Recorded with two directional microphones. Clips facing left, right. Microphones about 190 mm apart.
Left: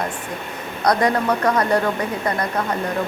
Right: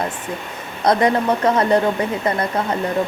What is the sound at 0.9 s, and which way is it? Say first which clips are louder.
Speech: right 2 dB; 25° right (ahead or behind).